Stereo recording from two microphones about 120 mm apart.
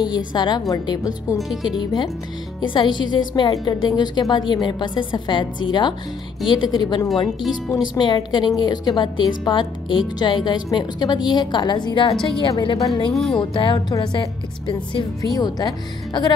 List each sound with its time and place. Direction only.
0.1 s speech: 40° left (ahead or behind)
1.5 s speech: centre (ahead or behind)
1.8 s speech: 40° left (ahead or behind)
12.7 s speech: 30° left (ahead or behind)
13.1 s speech: centre (ahead or behind)
13.4 s speech: 45° left (ahead or behind)
15.3 s speech: 35° left (ahead or behind)